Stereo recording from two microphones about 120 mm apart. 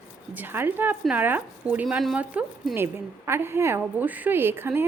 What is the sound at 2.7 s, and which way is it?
A woman's voice, 20° right (ahead or behind).